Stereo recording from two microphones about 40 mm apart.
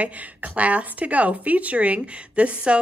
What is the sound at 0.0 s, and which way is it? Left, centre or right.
A woman's voice, right.